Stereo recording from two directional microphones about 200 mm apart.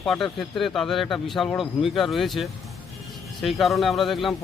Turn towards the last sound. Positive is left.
turn(degrees=0)  # may be behind; listen again after turning